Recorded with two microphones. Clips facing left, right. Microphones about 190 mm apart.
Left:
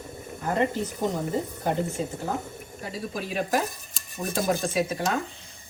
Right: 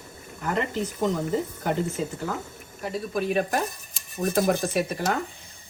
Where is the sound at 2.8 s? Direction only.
60° right (ahead or behind).